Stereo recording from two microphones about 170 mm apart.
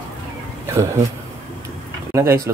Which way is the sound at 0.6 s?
15° right (ahead or behind).